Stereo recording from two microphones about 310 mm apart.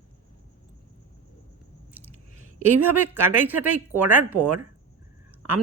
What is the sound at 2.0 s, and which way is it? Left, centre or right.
Chewing, centre.